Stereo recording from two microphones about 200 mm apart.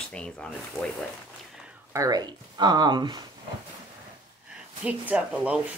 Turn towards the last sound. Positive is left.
turn(degrees=-5)  # may be behind; listen again after turning